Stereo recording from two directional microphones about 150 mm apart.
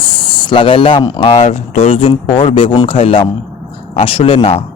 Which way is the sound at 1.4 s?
45° left (ahead or behind).